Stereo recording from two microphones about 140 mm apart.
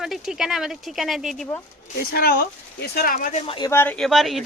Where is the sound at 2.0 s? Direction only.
90° left; by 3.3 s 75° left (ahead or behind).